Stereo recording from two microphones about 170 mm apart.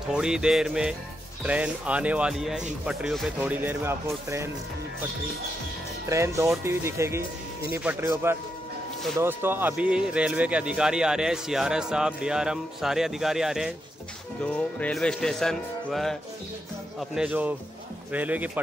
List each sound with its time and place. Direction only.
0.1 s speech: 5° right (ahead or behind)
6.0 s speech: 15° right (ahead or behind)